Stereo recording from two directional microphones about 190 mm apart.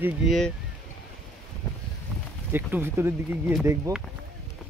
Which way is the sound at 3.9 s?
20° right (ahead or behind).